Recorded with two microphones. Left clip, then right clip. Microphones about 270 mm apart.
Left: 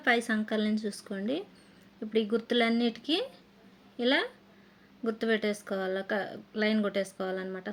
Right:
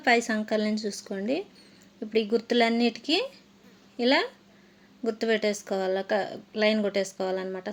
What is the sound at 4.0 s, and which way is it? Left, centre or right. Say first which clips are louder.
A woman's voice: right 4 dB; centre.